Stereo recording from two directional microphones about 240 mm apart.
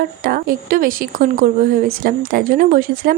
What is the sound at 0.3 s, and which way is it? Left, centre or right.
Speech, right.